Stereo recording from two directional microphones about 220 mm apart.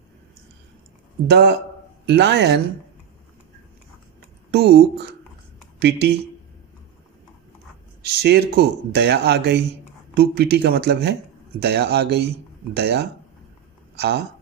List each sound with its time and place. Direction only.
1.3 s speech: 50° right (ahead or behind)
4.5 s speech: 50° right (ahead or behind)
8.2 s speech: 50° right (ahead or behind)